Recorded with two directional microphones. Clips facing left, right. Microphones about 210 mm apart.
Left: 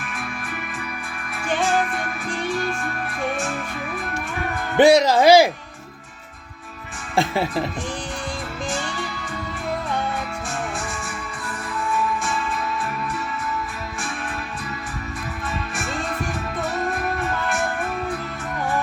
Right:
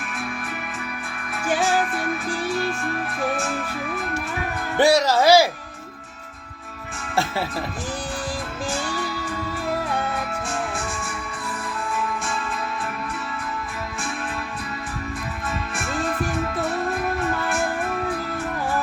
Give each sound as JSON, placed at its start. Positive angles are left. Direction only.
{"t": 1.5, "sound": "music", "side_deg": -5}
{"t": 4.8, "sound": "speech", "side_deg": 20}
{"t": 7.2, "sound": "speech", "side_deg": 20}